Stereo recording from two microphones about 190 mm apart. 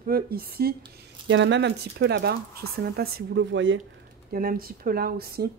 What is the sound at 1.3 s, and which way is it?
A woman's voice, 70° right (ahead or behind).